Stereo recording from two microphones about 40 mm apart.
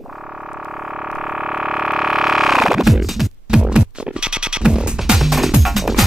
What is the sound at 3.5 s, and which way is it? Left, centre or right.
Music, right.